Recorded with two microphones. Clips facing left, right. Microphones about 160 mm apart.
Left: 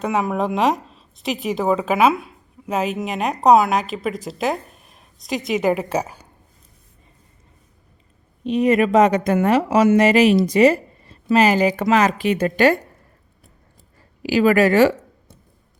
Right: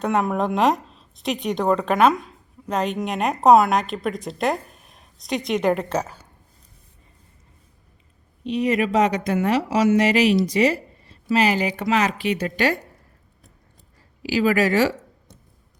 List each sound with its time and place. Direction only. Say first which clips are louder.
0.0 s speech: even; centre (ahead or behind)
8.4 s a woman's voice: left 5 dB; 50° left (ahead or behind)
14.2 s speech: left 4 dB; 55° left (ahead or behind)